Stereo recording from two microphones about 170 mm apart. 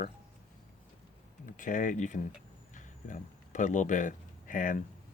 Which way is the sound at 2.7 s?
50° left (ahead or behind).